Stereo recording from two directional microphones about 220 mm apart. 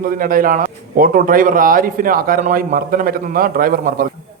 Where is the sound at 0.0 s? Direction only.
40° right (ahead or behind).